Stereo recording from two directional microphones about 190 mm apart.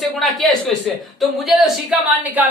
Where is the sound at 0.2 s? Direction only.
Centre (ahead or behind).